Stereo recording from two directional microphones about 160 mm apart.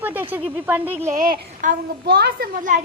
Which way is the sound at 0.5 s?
10° right (ahead or behind).